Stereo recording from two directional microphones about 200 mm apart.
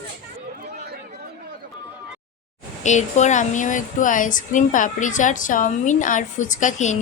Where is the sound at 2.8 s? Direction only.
35° left (ahead or behind).